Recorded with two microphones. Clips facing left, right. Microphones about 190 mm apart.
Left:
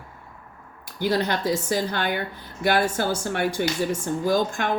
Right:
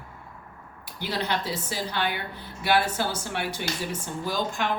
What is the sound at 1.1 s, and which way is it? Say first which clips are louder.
A woman's voice: left 5 dB; 45° left (ahead or behind).